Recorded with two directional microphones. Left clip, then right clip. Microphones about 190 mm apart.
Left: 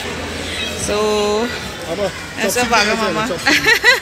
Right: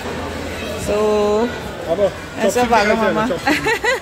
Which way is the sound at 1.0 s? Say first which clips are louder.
Right 1 dB; 10° right (ahead or behind).